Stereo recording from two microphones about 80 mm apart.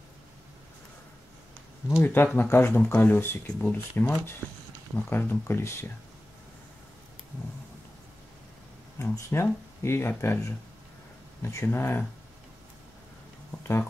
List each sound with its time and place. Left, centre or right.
1.9 s speech: left
9.3 s speech: left
11.4 s speech: left